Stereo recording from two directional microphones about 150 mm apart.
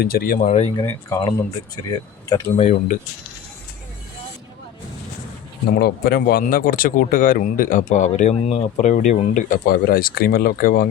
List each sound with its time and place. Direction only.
0.0 s speech: 85° left
0.4 s speech: 50° left (ahead or behind)
0.8 s speech: 25° left (ahead or behind)
2.6 s speech: 55° left (ahead or behind)
5.8 s speech: 90° left; by 10.8 s 75° left (ahead or behind)